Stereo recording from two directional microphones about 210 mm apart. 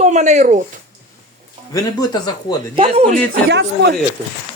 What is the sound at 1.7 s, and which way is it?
Speech, 20° left (ahead or behind).